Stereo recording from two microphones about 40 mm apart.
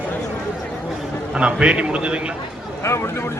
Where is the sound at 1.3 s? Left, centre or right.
Right.